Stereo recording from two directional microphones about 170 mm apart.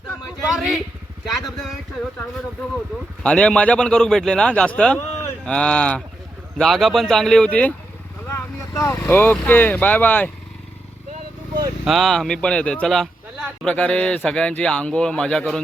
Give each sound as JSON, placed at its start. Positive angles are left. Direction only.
{"t": 0.4, "sound": "speech", "side_deg": 0}
{"t": 3.2, "sound": "speech", "side_deg": 5}
{"t": 8.3, "sound": "speech", "side_deg": 15}
{"t": 11.9, "sound": "speech", "side_deg": 0}